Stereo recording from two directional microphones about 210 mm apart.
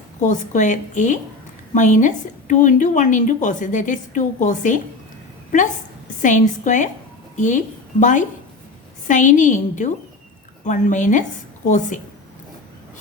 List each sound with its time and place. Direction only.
0.2 s a woman's voice: 35° left (ahead or behind)
6.2 s a woman's voice: 35° left (ahead or behind)